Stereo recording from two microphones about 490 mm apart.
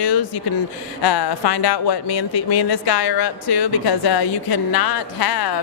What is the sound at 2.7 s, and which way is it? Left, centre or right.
Speech, left.